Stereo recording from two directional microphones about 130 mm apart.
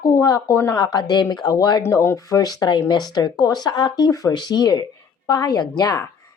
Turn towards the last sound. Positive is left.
turn(degrees=30)  # may be behind; listen again after turning